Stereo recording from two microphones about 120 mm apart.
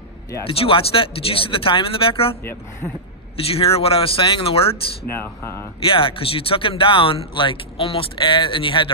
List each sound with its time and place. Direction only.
0.5 s speech: 50° left (ahead or behind)
2.8 s speech: 20° left (ahead or behind)
3.3 s speech: 55° left (ahead or behind)
5.2 s speech: 20° left (ahead or behind)
5.9 s speech: 45° left (ahead or behind)